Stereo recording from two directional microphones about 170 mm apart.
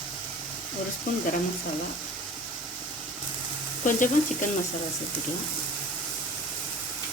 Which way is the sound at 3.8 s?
50° left (ahead or behind).